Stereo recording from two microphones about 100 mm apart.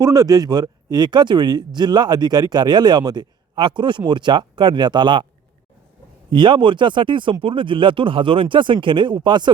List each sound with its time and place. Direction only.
0.0 s speech: 40° right (ahead or behind)
6.3 s speech: 50° right (ahead or behind)